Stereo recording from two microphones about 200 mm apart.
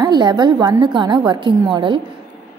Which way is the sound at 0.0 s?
20° right (ahead or behind).